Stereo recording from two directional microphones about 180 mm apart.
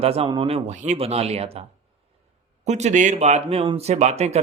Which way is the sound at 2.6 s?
40° right (ahead or behind).